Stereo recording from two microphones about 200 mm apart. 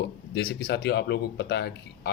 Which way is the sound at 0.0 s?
55° left (ahead or behind).